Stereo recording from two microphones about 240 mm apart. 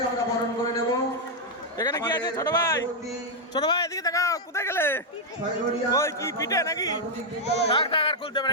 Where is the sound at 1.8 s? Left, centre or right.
Centre.